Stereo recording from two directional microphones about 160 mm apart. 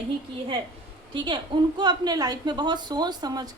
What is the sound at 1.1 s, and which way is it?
A woman's voice, 30° right (ahead or behind).